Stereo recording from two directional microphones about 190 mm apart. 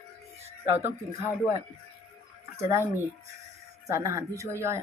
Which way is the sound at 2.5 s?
15° right (ahead or behind).